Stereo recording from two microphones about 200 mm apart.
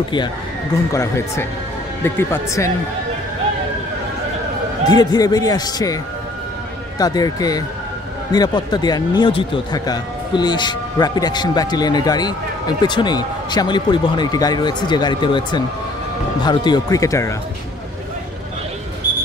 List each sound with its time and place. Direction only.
0.9 s speech: 15° left (ahead or behind)
4.8 s a man's voice: 20° left (ahead or behind)
7.0 s a man's voice: 20° left (ahead or behind)